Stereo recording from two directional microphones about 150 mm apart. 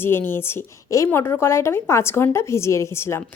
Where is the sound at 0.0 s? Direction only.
15° left (ahead or behind).